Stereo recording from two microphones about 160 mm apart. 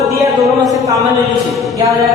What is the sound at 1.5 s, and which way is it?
Mantra, centre (ahead or behind).